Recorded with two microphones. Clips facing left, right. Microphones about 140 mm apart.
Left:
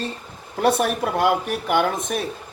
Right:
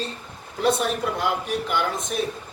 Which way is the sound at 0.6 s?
55° left (ahead or behind).